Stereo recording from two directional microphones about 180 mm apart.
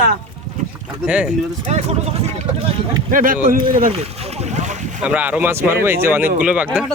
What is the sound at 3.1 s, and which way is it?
Speech, 50° right (ahead or behind).